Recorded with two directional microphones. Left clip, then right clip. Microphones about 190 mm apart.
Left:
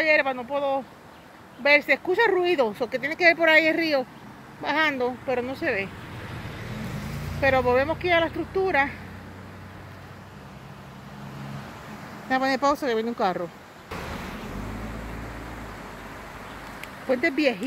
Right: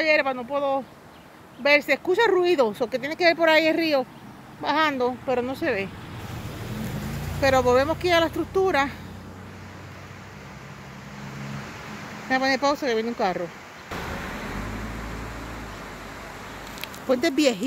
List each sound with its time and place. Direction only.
0.0 s speech: 15° right (ahead or behind)
7.4 s speech: 15° right (ahead or behind)
12.3 s speech: centre (ahead or behind)
17.1 s speech: 15° right (ahead or behind)